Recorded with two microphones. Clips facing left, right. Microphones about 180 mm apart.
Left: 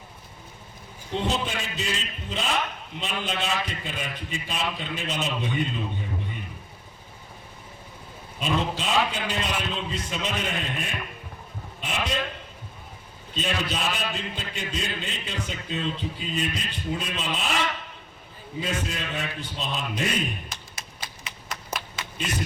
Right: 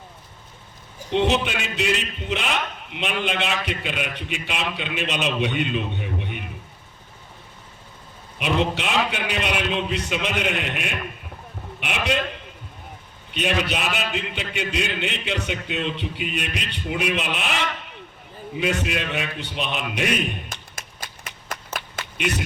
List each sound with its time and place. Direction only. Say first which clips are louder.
1.1 s a man's voice: right 6 dB; 75° right (ahead or behind)
8.4 s a man's voice: right 4 dB; 70° right (ahead or behind)
13.3 s a man's voice: right 5 dB; 70° right (ahead or behind)
20.5 s a sound: right 2 dB; 50° right (ahead or behind)
22.2 s a man's voice: right 5 dB; 75° right (ahead or behind)